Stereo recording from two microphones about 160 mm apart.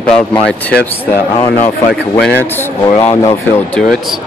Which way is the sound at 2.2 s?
10° left (ahead or behind).